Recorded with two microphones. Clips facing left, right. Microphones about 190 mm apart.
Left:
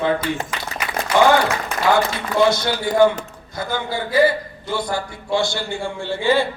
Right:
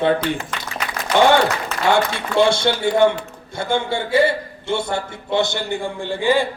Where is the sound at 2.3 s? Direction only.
30° right (ahead or behind).